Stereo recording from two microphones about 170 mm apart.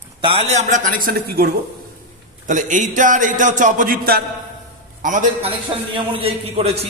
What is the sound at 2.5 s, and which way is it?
A man's voice, 50° right (ahead or behind).